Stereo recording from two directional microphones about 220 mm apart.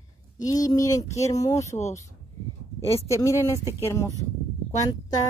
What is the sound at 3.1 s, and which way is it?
Speech, 15° left (ahead or behind).